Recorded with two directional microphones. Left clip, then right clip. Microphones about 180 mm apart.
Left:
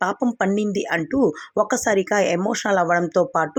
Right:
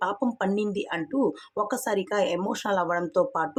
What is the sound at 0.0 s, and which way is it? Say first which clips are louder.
Speech: left 5 dB; 20° left (ahead or behind).